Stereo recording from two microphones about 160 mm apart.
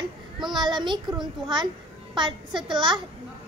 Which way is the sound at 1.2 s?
30° right (ahead or behind).